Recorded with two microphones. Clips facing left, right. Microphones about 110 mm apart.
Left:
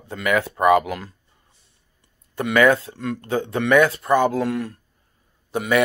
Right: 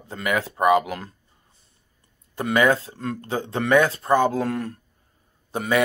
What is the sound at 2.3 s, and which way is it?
Speech, 25° right (ahead or behind).